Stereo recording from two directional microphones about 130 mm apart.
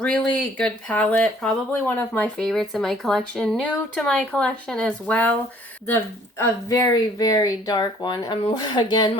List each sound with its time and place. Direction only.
0.0 s speech: 5° left (ahead or behind)
2.4 s speech: 5° left (ahead or behind)
6.4 s speech: 25° left (ahead or behind)